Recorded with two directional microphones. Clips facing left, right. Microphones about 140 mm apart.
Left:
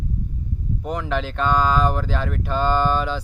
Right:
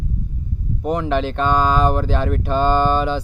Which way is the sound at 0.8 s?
20° right (ahead or behind).